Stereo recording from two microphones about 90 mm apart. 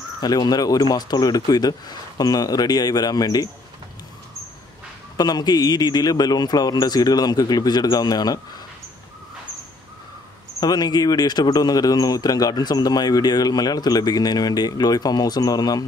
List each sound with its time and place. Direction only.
0.2 s speech: 50° left (ahead or behind)
5.1 s speech: 50° left (ahead or behind)
10.6 s speech: 50° left (ahead or behind)